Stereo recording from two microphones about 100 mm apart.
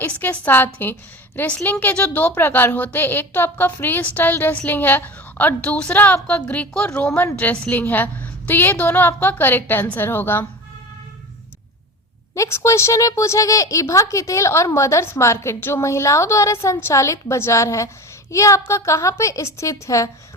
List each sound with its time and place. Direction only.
0.0 s a woman's voice: 15° left (ahead or behind)
12.3 s a woman's voice: 30° left (ahead or behind)